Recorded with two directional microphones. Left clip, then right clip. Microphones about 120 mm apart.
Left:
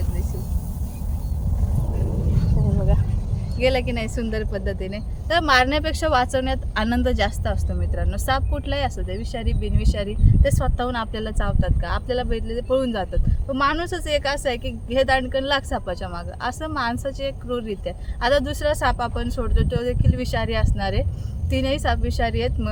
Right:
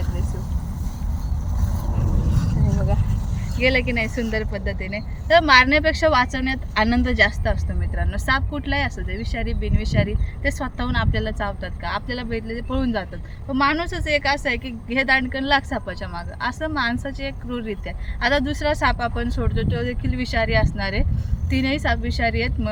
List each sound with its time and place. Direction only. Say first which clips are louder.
3.6 s speech: right 2 dB; 40° left (ahead or behind)